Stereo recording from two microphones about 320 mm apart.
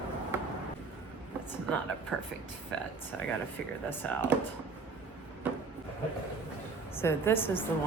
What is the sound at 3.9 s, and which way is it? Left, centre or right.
Speech, centre.